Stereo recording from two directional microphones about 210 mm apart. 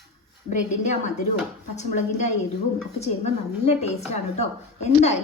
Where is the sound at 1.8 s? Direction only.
35° left (ahead or behind).